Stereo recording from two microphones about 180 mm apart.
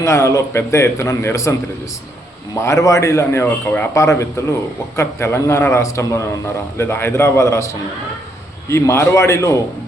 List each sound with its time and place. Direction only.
0.0 s a man's voice: 15° left (ahead or behind)
2.6 s a man's voice: 15° left (ahead or behind)